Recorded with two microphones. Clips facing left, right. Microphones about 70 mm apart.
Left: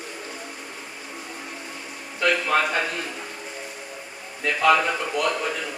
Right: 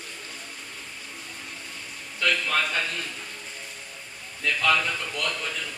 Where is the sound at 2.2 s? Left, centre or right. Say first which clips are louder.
Left 4 dB; left.